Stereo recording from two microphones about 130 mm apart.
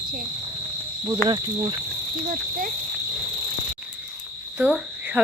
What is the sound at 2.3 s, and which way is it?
Speech, 90° right.